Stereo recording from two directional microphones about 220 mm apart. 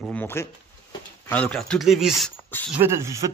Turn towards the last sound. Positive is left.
turn(degrees=-10)  # may be behind; listen again after turning